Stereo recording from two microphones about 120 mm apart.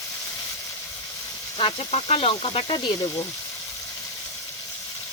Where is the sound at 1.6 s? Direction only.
50° left (ahead or behind).